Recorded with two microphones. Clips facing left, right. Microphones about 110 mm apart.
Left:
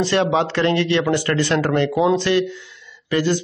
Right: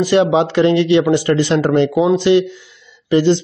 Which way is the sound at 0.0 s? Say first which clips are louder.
Right 5 dB; 15° right (ahead or behind).